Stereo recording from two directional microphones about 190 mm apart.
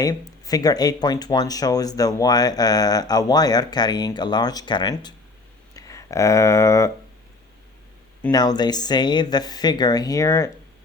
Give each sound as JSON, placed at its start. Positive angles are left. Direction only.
{"t": 0.0, "sound": "speech", "side_deg": 20}
{"t": 8.3, "sound": "speech", "side_deg": 20}